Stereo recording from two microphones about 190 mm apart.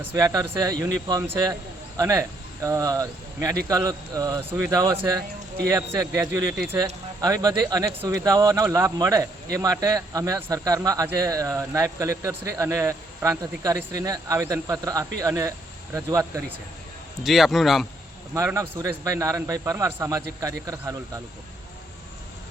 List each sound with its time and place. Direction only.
0.0 s speech: 10° right (ahead or behind)
17.2 s a man's voice: centre (ahead or behind)
18.3 s speech: 15° right (ahead or behind)